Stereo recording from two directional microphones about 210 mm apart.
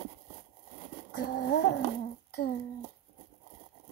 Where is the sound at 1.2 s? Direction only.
50° left (ahead or behind).